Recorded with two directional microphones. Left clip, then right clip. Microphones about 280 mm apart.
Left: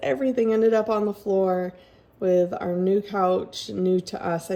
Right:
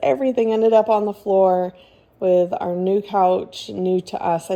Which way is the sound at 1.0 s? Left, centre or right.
Centre.